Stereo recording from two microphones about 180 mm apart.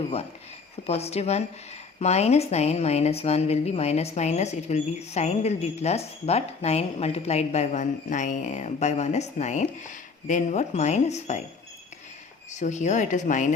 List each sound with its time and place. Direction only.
0.9 s a woman's voice: 35° left (ahead or behind)
12.5 s speech: 40° left (ahead or behind)